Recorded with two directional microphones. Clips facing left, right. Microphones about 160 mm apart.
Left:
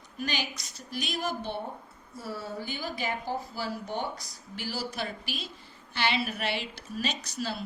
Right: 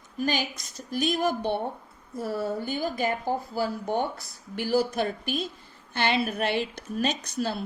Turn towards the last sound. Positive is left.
turn(degrees=-55)  # may be behind; listen again after turning